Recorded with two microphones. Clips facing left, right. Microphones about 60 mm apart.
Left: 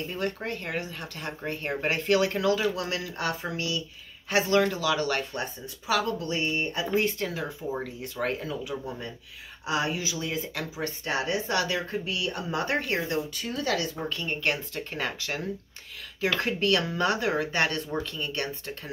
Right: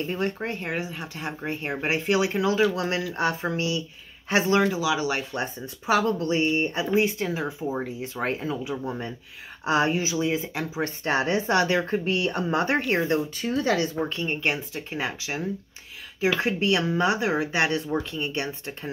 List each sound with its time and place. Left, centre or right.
0.1 s speech: right
4.6 s speech: centre
5.3 s speech: right
7.0 s speech: centre
10.8 s speech: right